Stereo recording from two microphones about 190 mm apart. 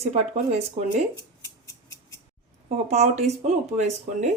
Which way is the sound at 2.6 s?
35° right (ahead or behind).